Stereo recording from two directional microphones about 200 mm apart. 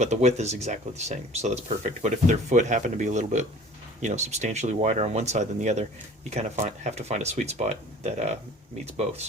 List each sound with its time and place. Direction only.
0.0 s speech: 35° right (ahead or behind)